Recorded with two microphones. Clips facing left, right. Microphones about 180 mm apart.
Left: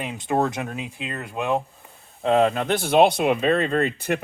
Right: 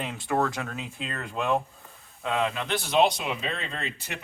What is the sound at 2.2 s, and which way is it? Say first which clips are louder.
Speech: left 9 dB; 35° left (ahead or behind).